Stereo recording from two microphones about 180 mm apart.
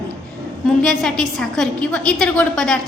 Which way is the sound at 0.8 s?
Centre (ahead or behind).